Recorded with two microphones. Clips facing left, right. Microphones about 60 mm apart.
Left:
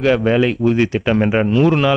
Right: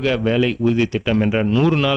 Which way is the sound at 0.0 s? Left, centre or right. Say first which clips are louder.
Left 3 dB; left.